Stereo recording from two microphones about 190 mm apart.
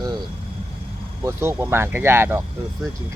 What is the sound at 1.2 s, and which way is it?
Speech, 15° right (ahead or behind).